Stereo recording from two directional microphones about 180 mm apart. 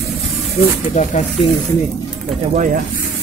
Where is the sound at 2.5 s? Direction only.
45° right (ahead or behind).